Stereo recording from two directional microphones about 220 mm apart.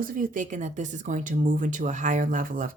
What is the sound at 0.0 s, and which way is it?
Speech, 40° right (ahead or behind).